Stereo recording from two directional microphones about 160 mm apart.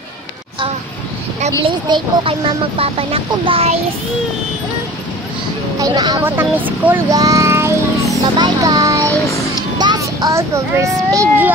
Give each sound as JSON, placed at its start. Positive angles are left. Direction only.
{"t": 1.9, "sound": "speech", "side_deg": -30}
{"t": 5.8, "sound": "speech", "side_deg": -25}
{"t": 6.2, "sound": "speech", "side_deg": -10}
{"t": 8.1, "sound": "a sound", "side_deg": -20}
{"t": 9.8, "sound": "child singing", "side_deg": -25}
{"t": 11.1, "sound": "speech", "side_deg": -15}